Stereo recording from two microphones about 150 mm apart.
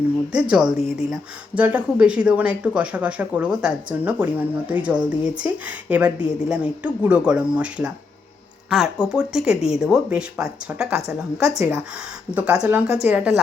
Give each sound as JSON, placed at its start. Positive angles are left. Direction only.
{"t": 0.3, "sound": "speech", "side_deg": -5}